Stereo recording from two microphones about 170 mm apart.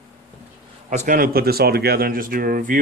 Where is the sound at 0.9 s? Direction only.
45° right (ahead or behind).